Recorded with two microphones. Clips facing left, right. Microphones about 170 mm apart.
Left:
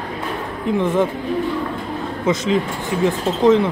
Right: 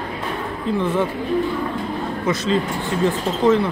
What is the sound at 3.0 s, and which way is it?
Speech, 20° left (ahead or behind).